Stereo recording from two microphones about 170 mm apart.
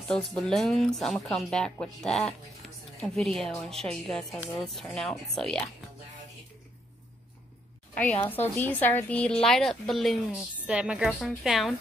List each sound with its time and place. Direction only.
0.1 s speech: 5° left (ahead or behind)
7.9 s speech: 10° left (ahead or behind)